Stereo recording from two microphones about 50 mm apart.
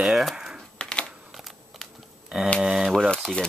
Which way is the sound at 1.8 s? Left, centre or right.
Centre.